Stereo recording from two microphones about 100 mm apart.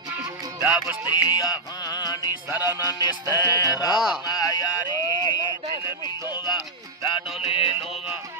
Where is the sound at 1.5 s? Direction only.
45° left (ahead or behind).